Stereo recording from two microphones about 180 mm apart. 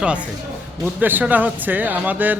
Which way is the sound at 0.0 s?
5° right (ahead or behind).